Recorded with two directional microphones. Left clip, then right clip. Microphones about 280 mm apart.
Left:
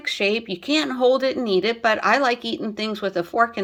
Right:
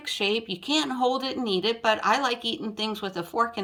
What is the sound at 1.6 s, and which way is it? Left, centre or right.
A woman's voice, centre.